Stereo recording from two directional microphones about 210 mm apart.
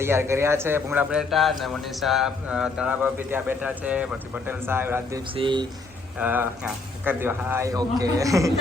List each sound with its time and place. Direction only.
0.0 s a man's voice: 10° right (ahead or behind)
5.4 s speech: 25° right (ahead or behind)
6.1 s a man's voice: 10° right (ahead or behind)